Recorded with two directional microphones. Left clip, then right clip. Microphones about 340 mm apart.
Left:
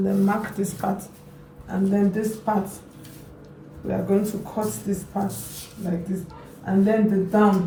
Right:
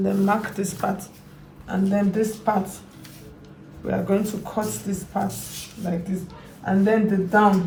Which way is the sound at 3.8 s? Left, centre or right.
Centre.